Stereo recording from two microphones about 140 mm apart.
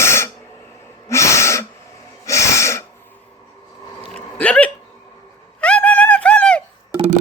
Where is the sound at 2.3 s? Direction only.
20° left (ahead or behind).